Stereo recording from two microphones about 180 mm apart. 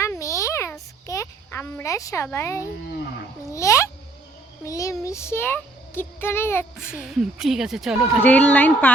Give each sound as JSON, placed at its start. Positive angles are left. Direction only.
{"t": 0.0, "sound": "a sound", "side_deg": 15}
{"t": 3.5, "sound": "a child's voice", "side_deg": 15}
{"t": 6.7, "sound": "speech", "side_deg": -5}